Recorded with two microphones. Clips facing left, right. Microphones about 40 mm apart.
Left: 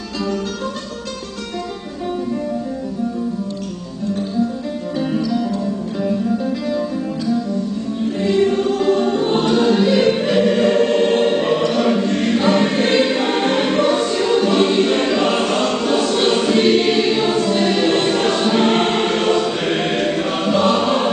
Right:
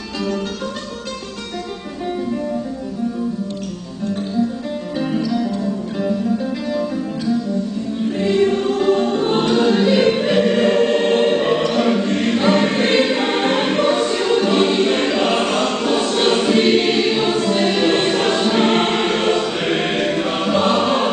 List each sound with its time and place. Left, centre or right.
4.9 s music: centre
8.2 s music: centre
9.8 s choir: centre
13.7 s music: right
14.6 s choir: centre
15.4 s choir: centre
15.7 s choir: centre
19.6 s choir: right
20.2 s choir: centre
20.7 s chant: centre